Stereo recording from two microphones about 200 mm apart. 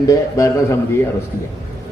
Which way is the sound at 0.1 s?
15° left (ahead or behind).